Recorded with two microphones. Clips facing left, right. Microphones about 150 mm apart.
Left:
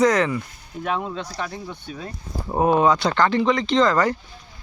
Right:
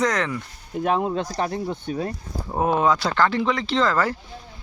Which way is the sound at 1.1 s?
45° right (ahead or behind).